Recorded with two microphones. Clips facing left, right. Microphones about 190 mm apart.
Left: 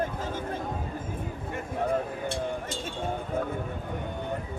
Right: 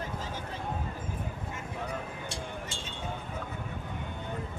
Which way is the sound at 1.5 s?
55° left (ahead or behind).